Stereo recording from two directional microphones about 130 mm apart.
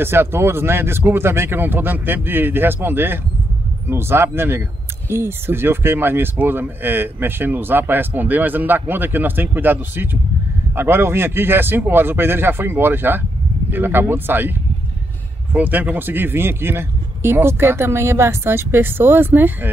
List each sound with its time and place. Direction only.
0.0 s speech: 15° right (ahead or behind)
15.5 s speech: 15° right (ahead or behind)